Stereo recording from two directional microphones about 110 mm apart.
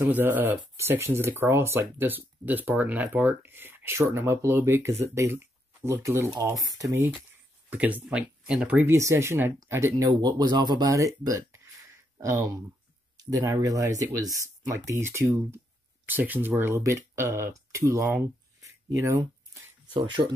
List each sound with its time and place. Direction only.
0.0 s speech: 15° right (ahead or behind)
7.7 s speech: 15° right (ahead or behind)
8.8 s speech: 25° right (ahead or behind)
19.9 s speech: 50° right (ahead or behind)